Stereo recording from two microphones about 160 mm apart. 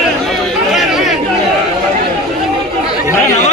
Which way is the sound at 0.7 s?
Centre (ahead or behind).